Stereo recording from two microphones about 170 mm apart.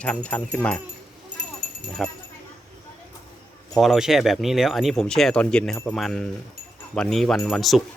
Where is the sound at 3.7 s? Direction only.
Centre (ahead or behind).